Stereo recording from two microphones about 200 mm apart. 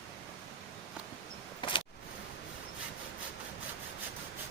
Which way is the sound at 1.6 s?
25° left (ahead or behind).